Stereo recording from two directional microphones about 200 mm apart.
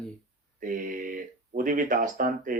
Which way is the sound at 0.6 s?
45° right (ahead or behind).